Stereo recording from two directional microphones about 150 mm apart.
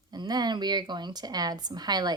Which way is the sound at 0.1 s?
25° right (ahead or behind).